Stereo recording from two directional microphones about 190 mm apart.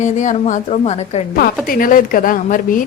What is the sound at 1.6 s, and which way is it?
Speech, 45° left (ahead or behind).